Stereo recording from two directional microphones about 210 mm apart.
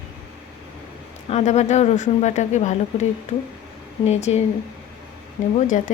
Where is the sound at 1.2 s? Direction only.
30° left (ahead or behind).